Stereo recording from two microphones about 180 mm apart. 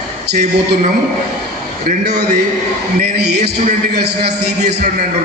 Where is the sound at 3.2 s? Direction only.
65° right (ahead or behind).